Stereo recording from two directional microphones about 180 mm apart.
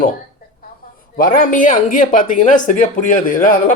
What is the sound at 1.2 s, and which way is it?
Speech, 50° left (ahead or behind).